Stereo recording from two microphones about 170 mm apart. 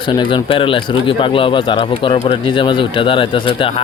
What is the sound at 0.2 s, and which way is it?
Speech, 30° left (ahead or behind).